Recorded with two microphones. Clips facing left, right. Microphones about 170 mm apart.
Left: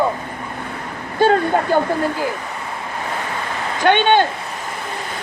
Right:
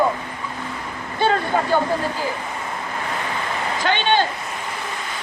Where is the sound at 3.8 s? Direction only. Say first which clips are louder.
Left 6 dB; 55° left (ahead or behind).